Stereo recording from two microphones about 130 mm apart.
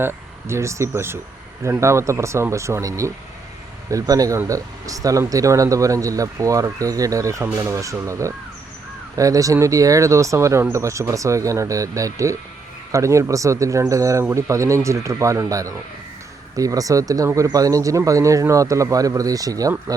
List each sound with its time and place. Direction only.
0.0 s speech: 20° right (ahead or behind)